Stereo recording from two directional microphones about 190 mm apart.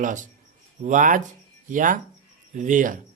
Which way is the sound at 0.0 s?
40° right (ahead or behind).